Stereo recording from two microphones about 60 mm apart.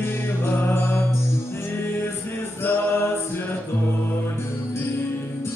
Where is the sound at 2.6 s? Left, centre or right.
Left.